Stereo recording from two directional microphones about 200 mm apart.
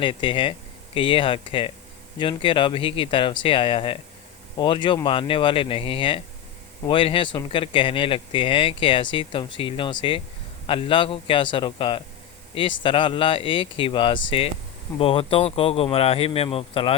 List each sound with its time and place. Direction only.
0.0 s speech: 25° left (ahead or behind)